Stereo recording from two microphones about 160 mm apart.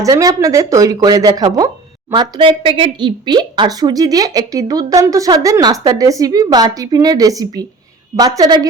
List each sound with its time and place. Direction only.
0.0 s speech: 20° right (ahead or behind)